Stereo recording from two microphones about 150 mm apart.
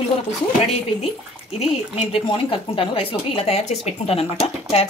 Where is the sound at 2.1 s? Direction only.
35° left (ahead or behind).